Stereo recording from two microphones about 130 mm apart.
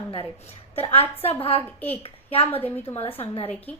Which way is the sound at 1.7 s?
10° left (ahead or behind).